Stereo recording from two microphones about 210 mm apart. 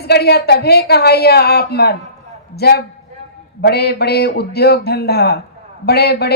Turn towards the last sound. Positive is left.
turn(degrees=50)  # may be behind; listen again after turning